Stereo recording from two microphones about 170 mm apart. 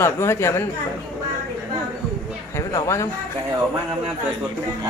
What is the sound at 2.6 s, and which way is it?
Speech, 15° left (ahead or behind).